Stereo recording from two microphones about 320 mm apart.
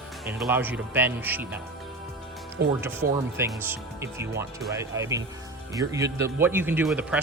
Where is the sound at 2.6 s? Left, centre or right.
Right.